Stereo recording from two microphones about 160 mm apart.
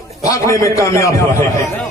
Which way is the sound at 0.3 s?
20° left (ahead or behind).